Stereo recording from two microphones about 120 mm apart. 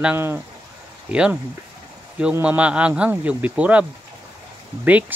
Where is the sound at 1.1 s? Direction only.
10° right (ahead or behind).